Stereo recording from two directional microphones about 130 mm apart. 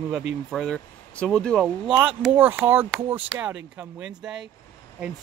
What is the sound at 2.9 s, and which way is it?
Speech, centre (ahead or behind).